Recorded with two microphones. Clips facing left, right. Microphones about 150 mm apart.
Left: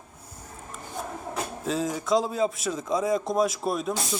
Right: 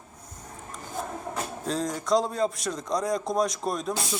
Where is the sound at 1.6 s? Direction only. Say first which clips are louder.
Left 2 dB; 5° left (ahead or behind).